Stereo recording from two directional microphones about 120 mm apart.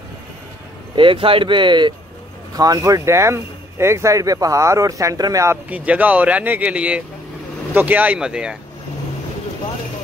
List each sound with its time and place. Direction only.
0.9 s speech: 45° right (ahead or behind); by 5.6 s 25° right (ahead or behind)
5.7 s speech: 10° right (ahead or behind)